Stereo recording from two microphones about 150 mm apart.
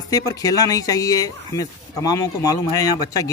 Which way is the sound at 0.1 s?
25° left (ahead or behind).